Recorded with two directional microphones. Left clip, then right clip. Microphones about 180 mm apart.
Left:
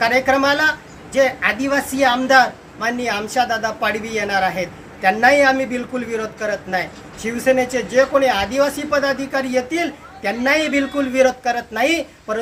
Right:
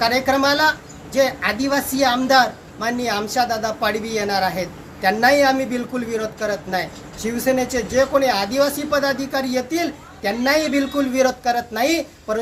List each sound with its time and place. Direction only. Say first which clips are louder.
0.0 s a man's voice: left 2 dB; 10° left (ahead or behind)